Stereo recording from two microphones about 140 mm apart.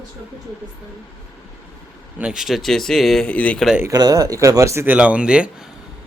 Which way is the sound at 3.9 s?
25° right (ahead or behind).